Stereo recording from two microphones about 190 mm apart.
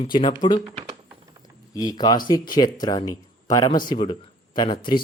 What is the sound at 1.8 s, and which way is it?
Speech, 20° left (ahead or behind).